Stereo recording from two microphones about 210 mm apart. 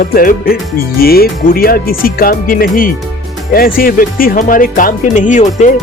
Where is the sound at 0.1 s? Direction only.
45° left (ahead or behind).